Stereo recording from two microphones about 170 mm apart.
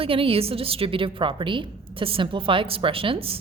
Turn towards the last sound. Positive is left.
turn(degrees=-35)  # may be behind; listen again after turning